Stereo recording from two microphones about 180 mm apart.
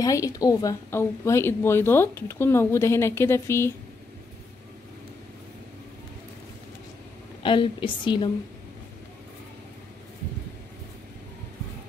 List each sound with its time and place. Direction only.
0.0 s speech: 20° left (ahead or behind)
7.4 s a woman's voice: 30° left (ahead or behind)